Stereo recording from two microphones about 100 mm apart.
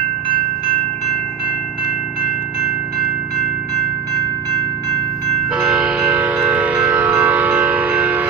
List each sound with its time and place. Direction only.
5.6 s train: 10° right (ahead or behind)